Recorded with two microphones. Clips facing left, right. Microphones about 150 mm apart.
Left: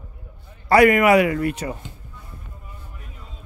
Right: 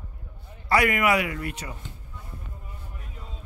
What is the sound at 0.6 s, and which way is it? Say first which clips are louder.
Speech: left 8 dB; 50° left (ahead or behind).